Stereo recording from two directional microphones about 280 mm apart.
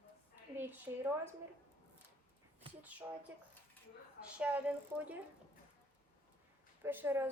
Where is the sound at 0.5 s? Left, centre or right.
Centre.